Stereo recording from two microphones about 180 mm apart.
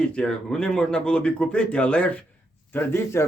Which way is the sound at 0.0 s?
5° left (ahead or behind).